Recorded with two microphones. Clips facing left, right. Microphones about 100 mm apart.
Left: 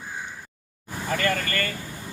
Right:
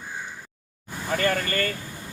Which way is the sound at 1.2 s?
30° right (ahead or behind).